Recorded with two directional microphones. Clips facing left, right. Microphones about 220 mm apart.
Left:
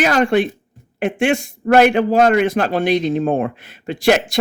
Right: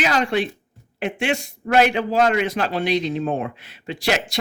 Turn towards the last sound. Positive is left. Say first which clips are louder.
# left 8 dB
turn(degrees=50)  # may be behind; listen again after turning